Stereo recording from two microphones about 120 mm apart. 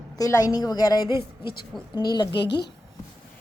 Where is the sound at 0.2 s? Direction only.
30° left (ahead or behind).